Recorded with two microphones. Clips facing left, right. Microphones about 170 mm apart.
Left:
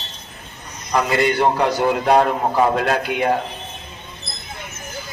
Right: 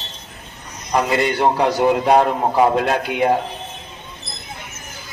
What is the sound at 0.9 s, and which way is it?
A man's voice, 20° right (ahead or behind).